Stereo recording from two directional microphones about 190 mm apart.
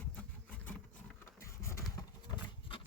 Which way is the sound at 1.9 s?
25° left (ahead or behind).